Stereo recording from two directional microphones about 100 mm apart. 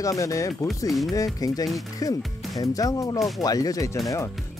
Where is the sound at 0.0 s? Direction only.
35° left (ahead or behind).